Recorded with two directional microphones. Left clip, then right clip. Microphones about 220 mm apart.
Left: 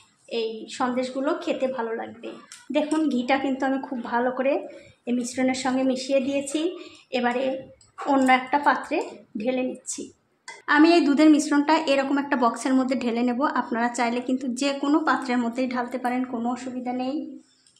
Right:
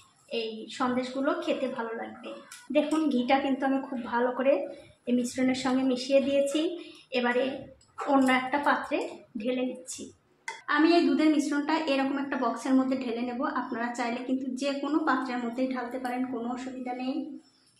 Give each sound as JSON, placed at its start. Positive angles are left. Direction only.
{"t": 0.3, "sound": "a woman's voice", "side_deg": 40}
{"t": 2.7, "sound": "a woman's voice", "side_deg": 40}